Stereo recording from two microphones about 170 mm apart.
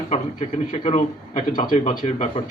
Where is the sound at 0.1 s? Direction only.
40° left (ahead or behind).